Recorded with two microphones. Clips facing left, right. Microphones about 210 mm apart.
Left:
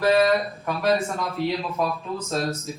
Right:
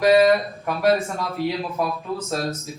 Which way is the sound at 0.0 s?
15° right (ahead or behind).